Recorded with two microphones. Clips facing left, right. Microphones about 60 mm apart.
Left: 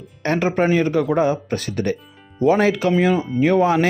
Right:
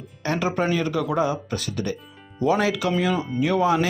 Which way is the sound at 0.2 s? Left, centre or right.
Left.